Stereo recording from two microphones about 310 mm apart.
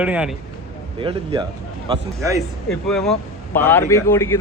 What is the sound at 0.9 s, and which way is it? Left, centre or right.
A man's voice, centre.